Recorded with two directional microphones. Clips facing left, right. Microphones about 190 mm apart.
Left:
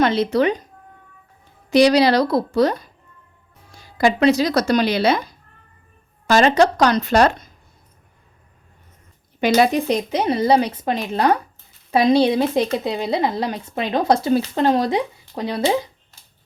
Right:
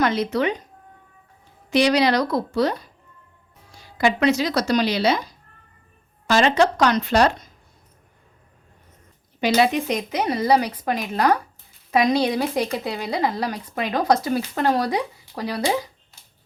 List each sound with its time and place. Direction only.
0.0 s a woman's voice: 30° left (ahead or behind)
1.7 s a woman's voice: 35° left (ahead or behind)
2.6 s speech: 45° left (ahead or behind)
3.9 s speech: 35° left (ahead or behind); by 5.4 s 55° left (ahead or behind)
6.2 s speech: 45° left (ahead or behind)
9.4 s speech: 55° left (ahead or behind)
9.7 s speech: 30° left (ahead or behind)